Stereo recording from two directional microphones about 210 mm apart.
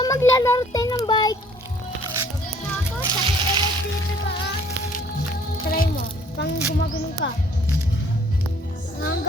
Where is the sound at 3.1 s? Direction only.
20° right (ahead or behind).